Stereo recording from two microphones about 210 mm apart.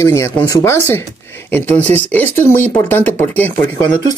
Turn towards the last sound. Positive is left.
turn(degrees=10)  # may be behind; listen again after turning